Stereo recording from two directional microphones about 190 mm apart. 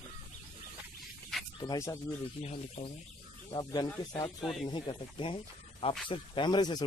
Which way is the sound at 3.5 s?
25° left (ahead or behind).